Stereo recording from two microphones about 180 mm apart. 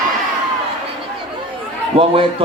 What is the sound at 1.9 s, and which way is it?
Speech, 30° right (ahead or behind).